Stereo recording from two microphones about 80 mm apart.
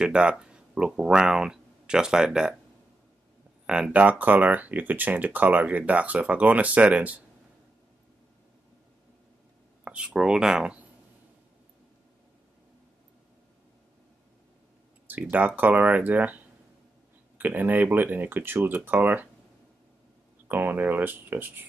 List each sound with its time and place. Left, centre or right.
0.0 s speech: centre
3.6 s speech: centre
9.8 s speech: centre
15.3 s speech: right
20.4 s speech: right